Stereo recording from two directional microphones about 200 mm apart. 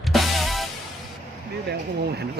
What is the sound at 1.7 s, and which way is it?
Speech, 55° right (ahead or behind).